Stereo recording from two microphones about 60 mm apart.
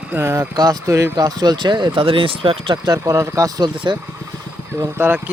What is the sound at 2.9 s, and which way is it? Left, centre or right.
Speech, right.